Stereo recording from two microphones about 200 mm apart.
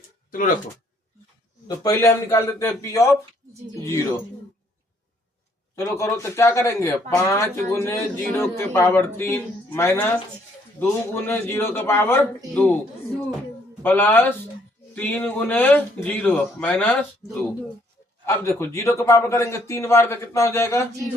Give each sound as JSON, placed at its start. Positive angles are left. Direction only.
{"t": 0.3, "sound": "speech", "side_deg": 45}
{"t": 1.6, "sound": "speech", "side_deg": 15}
{"t": 5.7, "sound": "speech", "side_deg": 15}
{"t": 13.8, "sound": "speech", "side_deg": 10}
{"t": 18.3, "sound": "speech", "side_deg": 15}